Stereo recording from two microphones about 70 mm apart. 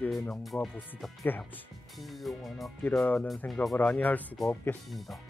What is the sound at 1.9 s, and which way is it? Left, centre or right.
Speech, centre.